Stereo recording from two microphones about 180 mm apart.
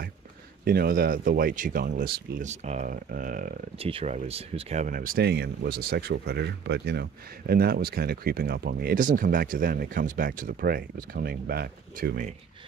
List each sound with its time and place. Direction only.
0.7 s speech: 55° right (ahead or behind)
2.4 s speech: 40° right (ahead or behind)
3.8 s speech: 35° right (ahead or behind); by 12.3 s 55° right (ahead or behind)